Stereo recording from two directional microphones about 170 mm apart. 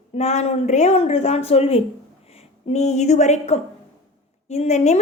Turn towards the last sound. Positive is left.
turn(degrees=40)  # may be behind; listen again after turning